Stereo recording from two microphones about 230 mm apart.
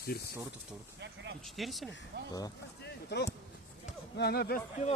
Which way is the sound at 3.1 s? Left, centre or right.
Left.